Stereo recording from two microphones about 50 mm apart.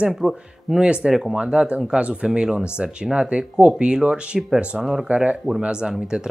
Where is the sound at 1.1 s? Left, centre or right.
Centre.